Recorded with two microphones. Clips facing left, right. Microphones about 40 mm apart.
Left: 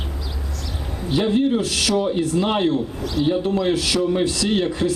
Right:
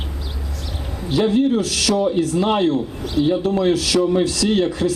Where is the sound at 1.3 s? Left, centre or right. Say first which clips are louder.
Right 2 dB; left.